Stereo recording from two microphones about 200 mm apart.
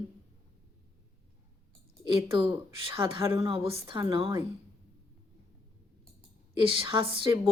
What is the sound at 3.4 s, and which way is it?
Speech, 30° right (ahead or behind).